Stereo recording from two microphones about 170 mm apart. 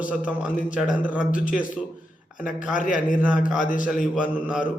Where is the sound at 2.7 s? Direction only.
50° left (ahead or behind).